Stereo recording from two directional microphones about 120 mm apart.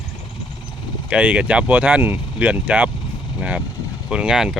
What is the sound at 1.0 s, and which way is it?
Speech, 10° right (ahead or behind).